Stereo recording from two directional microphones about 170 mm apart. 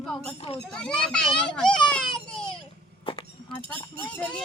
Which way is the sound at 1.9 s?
5° left (ahead or behind).